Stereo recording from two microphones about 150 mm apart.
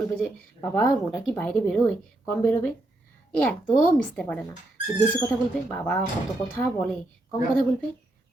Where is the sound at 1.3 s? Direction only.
10° left (ahead or behind).